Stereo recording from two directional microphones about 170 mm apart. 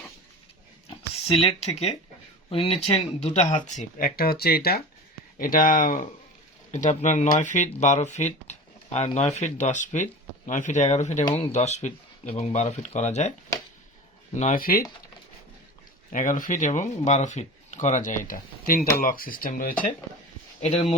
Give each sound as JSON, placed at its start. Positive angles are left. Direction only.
{"t": 0.9, "sound": "speech", "side_deg": 35}
{"t": 5.4, "sound": "speech", "side_deg": 55}
{"t": 14.3, "sound": "speech", "side_deg": 45}
{"t": 14.6, "sound": "speech", "side_deg": 60}
{"t": 16.1, "sound": "speech", "side_deg": 50}
{"t": 20.6, "sound": "speech", "side_deg": 45}